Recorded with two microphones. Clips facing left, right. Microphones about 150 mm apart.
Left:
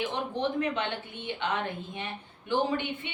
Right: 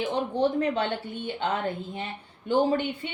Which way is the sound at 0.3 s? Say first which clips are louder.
Right 5 dB; 35° right (ahead or behind).